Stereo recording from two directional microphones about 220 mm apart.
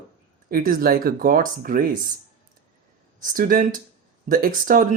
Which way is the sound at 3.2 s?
40° right (ahead or behind).